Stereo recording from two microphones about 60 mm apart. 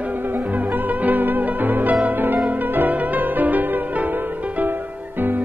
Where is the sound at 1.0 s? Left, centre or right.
Right.